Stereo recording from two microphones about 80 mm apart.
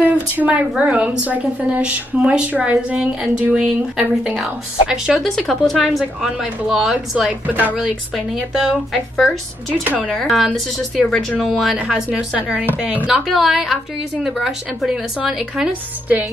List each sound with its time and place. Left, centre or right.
0.0 s a woman's voice: centre
7.4 s speech: right
8.4 s a woman's voice: centre
12.4 s a woman's voice: centre
13.0 s a woman's voice: centre